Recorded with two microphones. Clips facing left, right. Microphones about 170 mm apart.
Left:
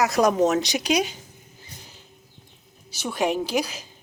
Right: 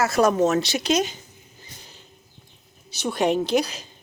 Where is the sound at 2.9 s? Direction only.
10° left (ahead or behind).